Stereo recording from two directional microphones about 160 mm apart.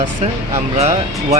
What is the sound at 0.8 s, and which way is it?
Speech, 40° right (ahead or behind).